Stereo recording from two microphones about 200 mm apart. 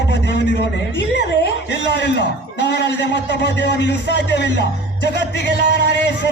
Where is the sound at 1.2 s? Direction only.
60° left (ahead or behind).